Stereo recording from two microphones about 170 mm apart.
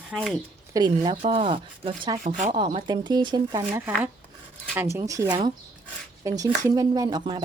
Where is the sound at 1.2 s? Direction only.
35° right (ahead or behind).